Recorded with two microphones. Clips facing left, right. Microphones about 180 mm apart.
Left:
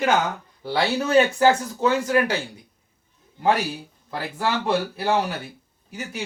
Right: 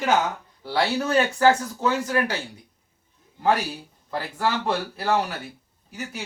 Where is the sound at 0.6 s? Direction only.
15° left (ahead or behind).